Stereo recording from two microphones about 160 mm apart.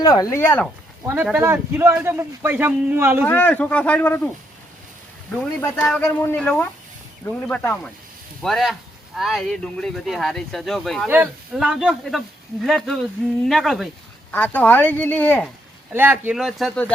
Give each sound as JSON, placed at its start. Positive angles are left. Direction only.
{"t": 0.0, "sound": "speech", "side_deg": 20}
{"t": 1.0, "sound": "a man's voice", "side_deg": -10}
{"t": 3.2, "sound": "speech", "side_deg": 10}
{"t": 5.6, "sound": "speech", "side_deg": 15}
{"t": 14.3, "sound": "speech", "side_deg": 10}
{"t": 15.9, "sound": "speech", "side_deg": -10}